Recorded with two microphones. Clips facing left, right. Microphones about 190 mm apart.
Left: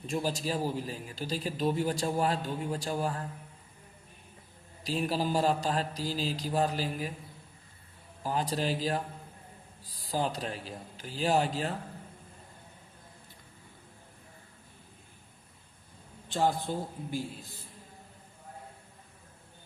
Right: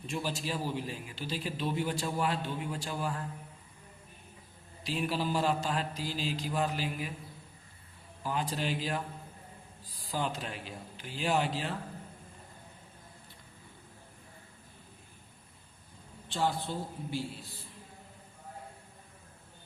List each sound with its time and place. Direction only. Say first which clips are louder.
0.1 s a man's voice: left 4 dB; 40° left (ahead or behind)
4.8 s a man's voice: left 2 dB; 40° left (ahead or behind)
8.2 s a man's voice: left 3 dB; 40° left (ahead or behind)
10.0 s a man's voice: left 3 dB; 40° left (ahead or behind)
16.3 s a man's voice: left 3 dB; 45° left (ahead or behind)